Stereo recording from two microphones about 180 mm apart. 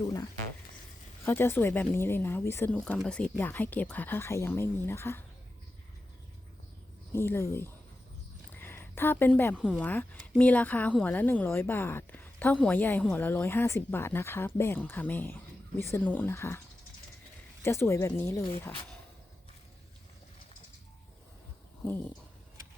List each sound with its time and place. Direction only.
0.0 s a woman's voice: 20° left (ahead or behind)
7.1 s a woman's voice: 15° left (ahead or behind)
17.6 s a woman's voice: 15° left (ahead or behind)
21.8 s a woman's voice: 10° left (ahead or behind)